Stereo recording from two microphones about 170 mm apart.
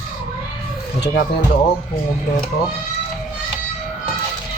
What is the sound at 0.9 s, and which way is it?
Speech, 90° left.